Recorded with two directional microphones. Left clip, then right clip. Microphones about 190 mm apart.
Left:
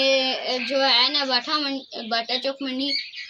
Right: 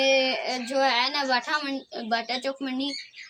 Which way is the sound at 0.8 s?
10° right (ahead or behind).